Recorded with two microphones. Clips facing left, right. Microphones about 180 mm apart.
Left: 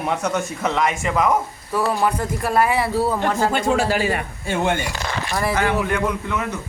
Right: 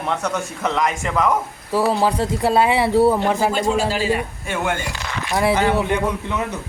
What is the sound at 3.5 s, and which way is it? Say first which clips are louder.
Speech: even; 60° left (ahead or behind).